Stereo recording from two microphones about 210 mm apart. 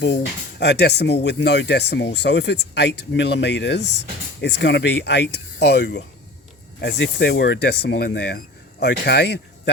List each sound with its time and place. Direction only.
0.6 s speech: 55° left (ahead or behind)